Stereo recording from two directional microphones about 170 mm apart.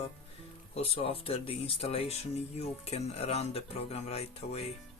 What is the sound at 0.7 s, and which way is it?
Speech, 35° left (ahead or behind).